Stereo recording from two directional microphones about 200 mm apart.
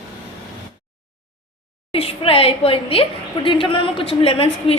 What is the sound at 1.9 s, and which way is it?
A woman's voice, 30° left (ahead or behind).